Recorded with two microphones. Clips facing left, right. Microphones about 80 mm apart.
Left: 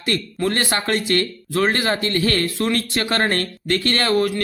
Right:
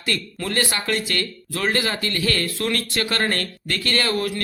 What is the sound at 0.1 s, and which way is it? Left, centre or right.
Speech, left.